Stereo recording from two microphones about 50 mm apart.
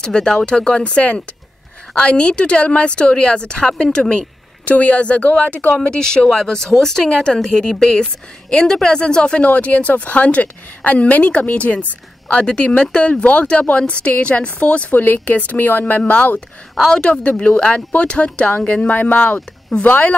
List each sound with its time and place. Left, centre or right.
0.0 s a woman's voice: centre
4.6 s a woman's voice: left
5.8 s a woman's voice: centre; by 20.2 s left